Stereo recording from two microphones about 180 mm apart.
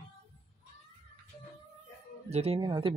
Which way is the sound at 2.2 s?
35° right (ahead or behind).